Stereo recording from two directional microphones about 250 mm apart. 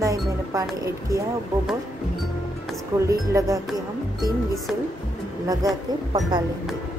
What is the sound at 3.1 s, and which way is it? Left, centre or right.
Speech, centre.